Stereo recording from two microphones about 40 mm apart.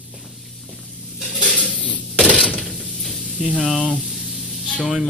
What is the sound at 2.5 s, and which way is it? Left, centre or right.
Mechanisms, centre.